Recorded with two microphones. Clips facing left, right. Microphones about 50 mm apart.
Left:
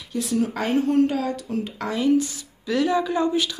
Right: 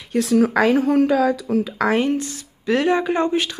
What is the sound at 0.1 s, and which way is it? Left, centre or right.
Speech, right.